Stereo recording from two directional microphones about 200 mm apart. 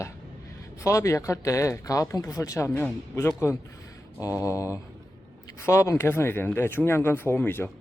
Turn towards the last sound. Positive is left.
turn(degrees=10)  # may be behind; listen again after turning